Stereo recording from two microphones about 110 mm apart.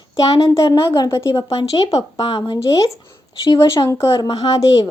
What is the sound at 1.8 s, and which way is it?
Speech, 40° left (ahead or behind).